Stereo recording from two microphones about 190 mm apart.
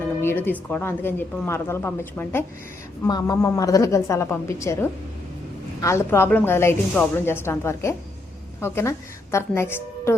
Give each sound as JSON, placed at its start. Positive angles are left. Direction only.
{"t": 0.2, "sound": "a woman's voice", "side_deg": 10}